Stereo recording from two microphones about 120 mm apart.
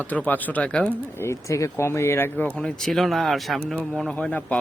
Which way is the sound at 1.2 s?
25° left (ahead or behind).